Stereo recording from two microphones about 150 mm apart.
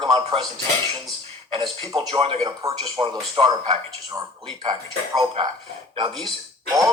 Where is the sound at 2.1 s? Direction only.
40° right (ahead or behind).